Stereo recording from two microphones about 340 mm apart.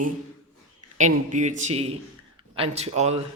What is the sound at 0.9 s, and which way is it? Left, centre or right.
A man's voice, right.